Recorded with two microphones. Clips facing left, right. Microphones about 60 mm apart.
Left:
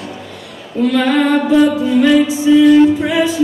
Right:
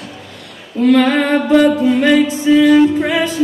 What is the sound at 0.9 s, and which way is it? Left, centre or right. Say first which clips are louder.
Female singing: right 2 dB; centre.